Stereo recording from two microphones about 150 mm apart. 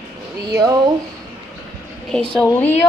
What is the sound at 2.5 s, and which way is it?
Speech, 10° left (ahead or behind).